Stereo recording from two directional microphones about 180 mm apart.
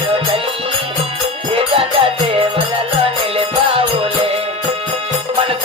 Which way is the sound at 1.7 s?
30° right (ahead or behind).